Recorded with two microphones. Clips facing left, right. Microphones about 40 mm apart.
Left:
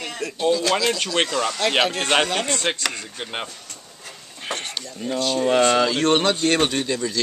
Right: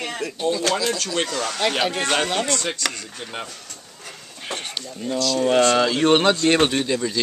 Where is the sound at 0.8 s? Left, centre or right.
Left.